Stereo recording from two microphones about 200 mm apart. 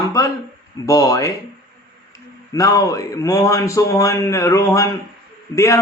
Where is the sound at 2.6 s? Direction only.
15° left (ahead or behind).